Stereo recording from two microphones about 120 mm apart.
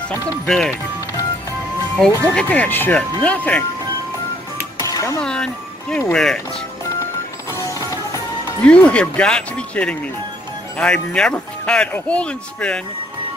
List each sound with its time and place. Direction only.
0.5 s speech: 5° left (ahead or behind)
2.0 s speech: 5° left (ahead or behind)
4.8 s a sound: 25° left (ahead or behind)
5.2 s speech: 5° left (ahead or behind)
7.5 s music: 25° left (ahead or behind)
8.6 s speech: 10° left (ahead or behind)